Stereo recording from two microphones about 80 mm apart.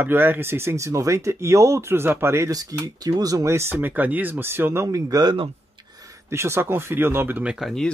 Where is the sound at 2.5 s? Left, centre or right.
Right.